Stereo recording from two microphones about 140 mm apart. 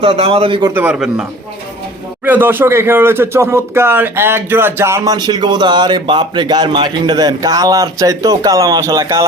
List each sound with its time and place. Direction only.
0.0 s a man's voice: 45° right (ahead or behind)
0.7 s speech: 10° right (ahead or behind)
2.2 s speech: 15° right (ahead or behind)
5.1 s speech: 30° right (ahead or behind)